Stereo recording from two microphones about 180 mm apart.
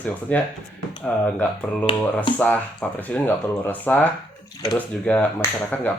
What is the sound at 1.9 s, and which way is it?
Speech, 30° left (ahead or behind).